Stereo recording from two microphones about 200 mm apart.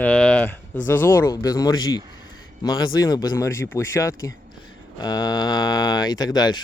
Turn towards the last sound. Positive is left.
turn(degrees=20)  # may be behind; listen again after turning